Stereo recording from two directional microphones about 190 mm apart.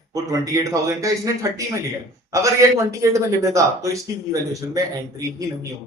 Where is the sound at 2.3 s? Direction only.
15° right (ahead or behind).